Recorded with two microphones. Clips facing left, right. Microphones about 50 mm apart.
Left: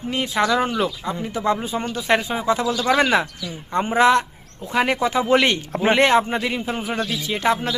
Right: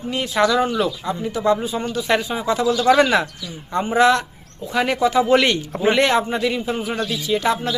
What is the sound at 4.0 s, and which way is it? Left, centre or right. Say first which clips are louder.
A man's voice: even; left.